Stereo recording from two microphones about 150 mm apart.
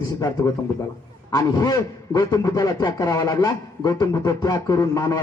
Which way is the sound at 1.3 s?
25° left (ahead or behind).